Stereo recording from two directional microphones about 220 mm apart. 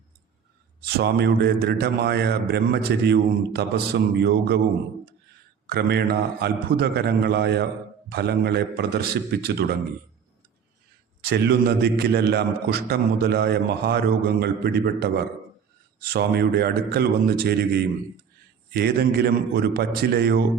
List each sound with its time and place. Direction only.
0.9 s a man's voice: 45° right (ahead or behind)
5.6 s a man's voice: 45° right (ahead or behind)
11.2 s a man's voice: 45° right (ahead or behind)
18.7 s a man's voice: 45° right (ahead or behind)